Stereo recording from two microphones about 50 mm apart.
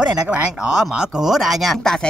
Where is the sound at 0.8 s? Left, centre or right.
Centre.